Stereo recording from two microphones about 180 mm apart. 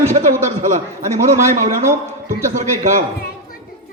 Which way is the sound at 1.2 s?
45° right (ahead or behind).